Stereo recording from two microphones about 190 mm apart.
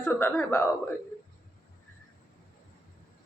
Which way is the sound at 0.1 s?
15° left (ahead or behind).